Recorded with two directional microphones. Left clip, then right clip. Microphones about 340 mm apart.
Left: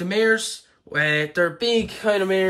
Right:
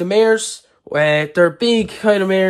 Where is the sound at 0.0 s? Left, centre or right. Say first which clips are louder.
Right 6 dB; centre.